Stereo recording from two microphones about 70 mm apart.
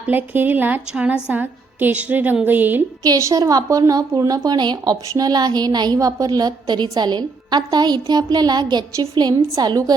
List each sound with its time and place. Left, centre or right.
0.0 s a woman's voice: right
3.2 s a woman's voice: right